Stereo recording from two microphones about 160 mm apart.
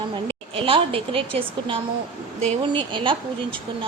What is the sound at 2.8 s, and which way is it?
Speech, 30° right (ahead or behind).